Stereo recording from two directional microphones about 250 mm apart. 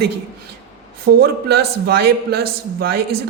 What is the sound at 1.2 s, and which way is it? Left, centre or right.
A man's voice, right.